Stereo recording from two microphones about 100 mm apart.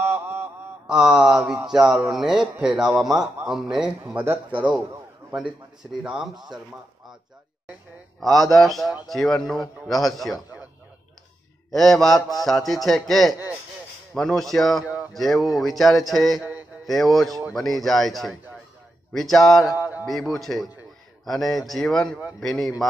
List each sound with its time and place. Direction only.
0.0 s a sound: 30° right (ahead or behind)
0.8 s a man's voice: 5° right (ahead or behind)
4.1 s a man's voice: 20° right (ahead or behind)
5.9 s a man's voice: 10° right (ahead or behind)
6.3 s speech: 45° right (ahead or behind)
8.2 s a man's voice: centre (ahead or behind)
11.7 s a man's voice: centre (ahead or behind)